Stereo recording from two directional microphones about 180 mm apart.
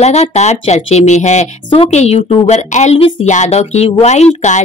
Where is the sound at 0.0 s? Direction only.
35° left (ahead or behind).